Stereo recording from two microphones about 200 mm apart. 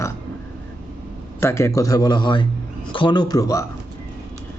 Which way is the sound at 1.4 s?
15° left (ahead or behind).